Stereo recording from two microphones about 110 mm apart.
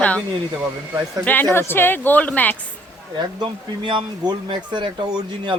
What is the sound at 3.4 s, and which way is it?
Speech, 45° right (ahead or behind).